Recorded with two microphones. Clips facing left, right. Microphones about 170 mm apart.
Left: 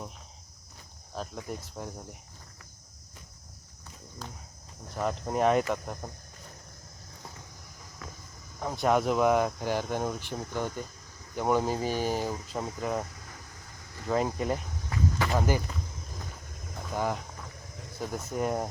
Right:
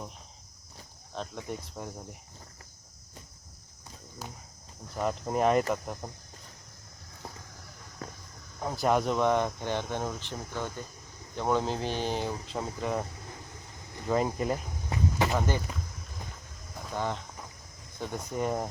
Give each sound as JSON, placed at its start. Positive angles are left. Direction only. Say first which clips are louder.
{"t": 1.1, "sound": "speech", "louder": "even", "side_deg": 5}
{"t": 4.2, "sound": "a sound", "louder": "even", "side_deg": -10}
{"t": 4.9, "sound": "speech", "louder": "even", "side_deg": 0}
{"t": 8.0, "sound": "vehicle", "louder": "right 4 dB", "side_deg": -35}
{"t": 8.5, "sound": "speech", "louder": "left 1 dB", "side_deg": 0}
{"t": 14.1, "sound": "speech", "louder": "even", "side_deg": -5}
{"t": 14.9, "sound": "a sound", "louder": "even", "side_deg": -20}
{"t": 15.3, "sound": "speech", "louder": "left 2 dB", "side_deg": 5}
{"t": 16.9, "sound": "speech", "louder": "left 2 dB", "side_deg": 10}